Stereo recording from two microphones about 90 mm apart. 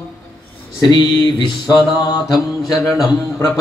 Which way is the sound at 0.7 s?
50° left (ahead or behind).